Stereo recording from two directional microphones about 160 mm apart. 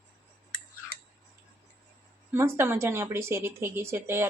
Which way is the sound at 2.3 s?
15° right (ahead or behind).